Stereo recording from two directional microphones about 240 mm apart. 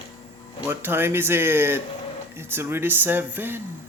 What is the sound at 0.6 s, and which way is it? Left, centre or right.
Mantra, centre.